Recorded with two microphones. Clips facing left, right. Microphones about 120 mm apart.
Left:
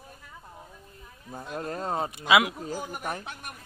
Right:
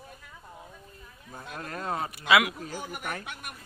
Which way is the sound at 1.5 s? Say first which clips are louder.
Left 3 dB; 30° left (ahead or behind).